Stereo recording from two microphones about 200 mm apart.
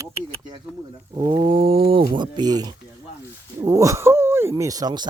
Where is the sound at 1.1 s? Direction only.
20° right (ahead or behind).